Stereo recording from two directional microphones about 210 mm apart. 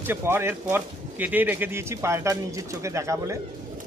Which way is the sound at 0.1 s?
10° right (ahead or behind).